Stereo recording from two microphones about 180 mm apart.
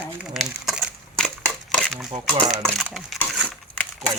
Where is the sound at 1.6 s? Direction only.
Centre (ahead or behind).